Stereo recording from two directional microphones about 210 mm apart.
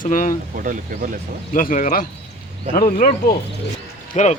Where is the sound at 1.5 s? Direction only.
40° left (ahead or behind).